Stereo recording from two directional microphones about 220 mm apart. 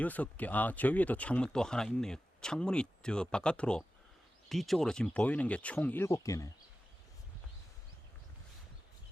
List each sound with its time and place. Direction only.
0.0 s speech: 5° left (ahead or behind)